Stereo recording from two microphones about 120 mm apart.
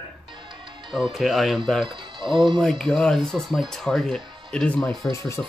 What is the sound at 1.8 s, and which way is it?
Speech, 45° right (ahead or behind).